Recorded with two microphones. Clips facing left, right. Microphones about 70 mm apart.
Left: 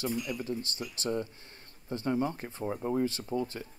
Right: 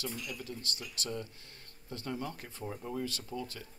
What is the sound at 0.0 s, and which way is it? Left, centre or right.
Speech, left.